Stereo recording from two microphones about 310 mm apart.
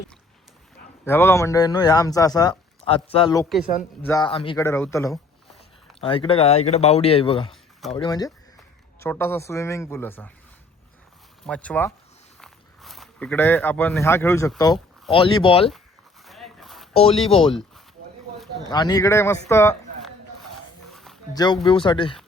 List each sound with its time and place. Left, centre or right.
1.0 s speech: centre
7.5 s a sound: centre
7.9 s speech: centre
11.4 s speech: centre
16.2 s dog: centre
16.9 s speech: centre
18.7 s speech: centre
19.5 s a sound: centre
21.3 s speech: centre